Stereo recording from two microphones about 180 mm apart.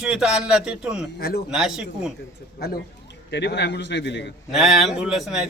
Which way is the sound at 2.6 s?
65° left (ahead or behind).